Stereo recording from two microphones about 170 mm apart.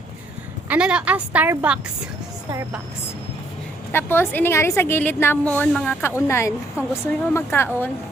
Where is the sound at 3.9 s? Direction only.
15° left (ahead or behind).